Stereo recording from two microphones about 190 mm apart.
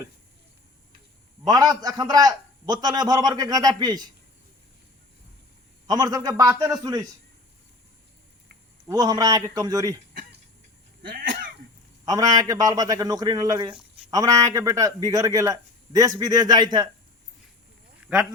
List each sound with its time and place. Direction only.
1.5 s a man's voice: 20° right (ahead or behind)
5.9 s a man's voice: 20° right (ahead or behind)
8.9 s a man's voice: 20° right (ahead or behind)
11.1 s cough: 45° right (ahead or behind)
12.0 s a man's voice: 20° right (ahead or behind)
18.1 s speech: 10° right (ahead or behind)